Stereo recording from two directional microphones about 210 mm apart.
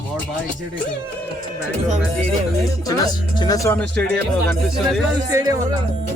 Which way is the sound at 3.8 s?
5° left (ahead or behind).